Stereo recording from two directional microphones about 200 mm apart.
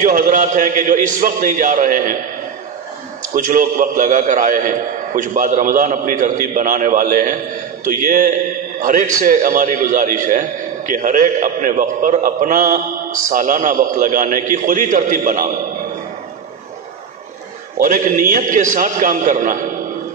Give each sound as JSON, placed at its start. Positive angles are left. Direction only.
{"t": 0.0, "sound": "a man's voice", "side_deg": -40}
{"t": 3.3, "sound": "a man's voice", "side_deg": -40}
{"t": 17.7, "sound": "a man's voice", "side_deg": -40}